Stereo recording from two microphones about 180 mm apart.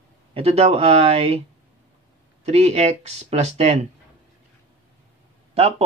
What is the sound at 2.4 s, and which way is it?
Speech, 35° right (ahead or behind).